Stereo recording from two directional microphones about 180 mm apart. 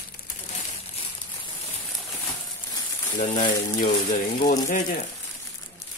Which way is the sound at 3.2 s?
50° left (ahead or behind).